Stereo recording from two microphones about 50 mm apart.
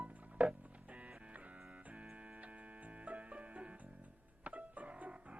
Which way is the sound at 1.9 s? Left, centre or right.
Right.